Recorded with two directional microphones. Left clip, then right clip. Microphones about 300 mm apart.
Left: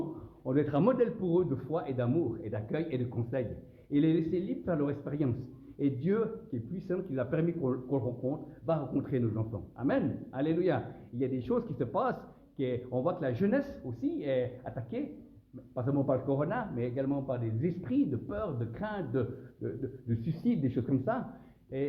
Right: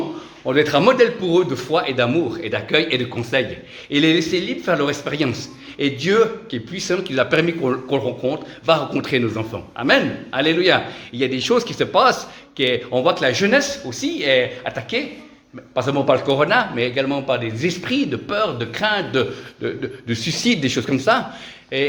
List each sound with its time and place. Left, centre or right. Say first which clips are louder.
0.4 s a man's voice: right 14 dB; centre
6.8 s a man's voice: right 15 dB; right